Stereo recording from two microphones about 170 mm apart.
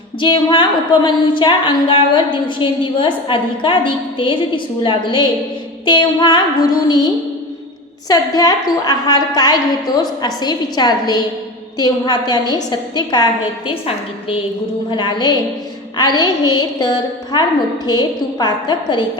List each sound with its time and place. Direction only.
0.2 s a woman's voice: 30° left (ahead or behind)